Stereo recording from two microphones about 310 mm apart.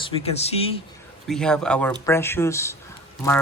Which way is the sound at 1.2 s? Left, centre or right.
Centre.